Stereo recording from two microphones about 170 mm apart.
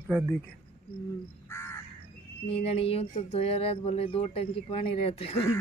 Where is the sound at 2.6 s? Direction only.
35° left (ahead or behind).